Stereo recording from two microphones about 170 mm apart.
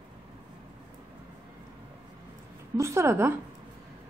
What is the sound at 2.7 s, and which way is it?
Speech, 15° right (ahead or behind).